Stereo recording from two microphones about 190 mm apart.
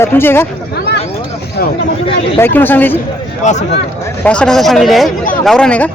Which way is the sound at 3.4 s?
35° left (ahead or behind).